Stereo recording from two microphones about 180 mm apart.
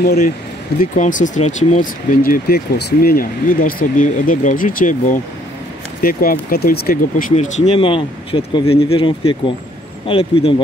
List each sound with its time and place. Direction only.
0.0 s speech: 55° left (ahead or behind)
0.7 s speech: 45° left (ahead or behind)
6.0 s speech: 55° left (ahead or behind); by 10.5 s 30° left (ahead or behind)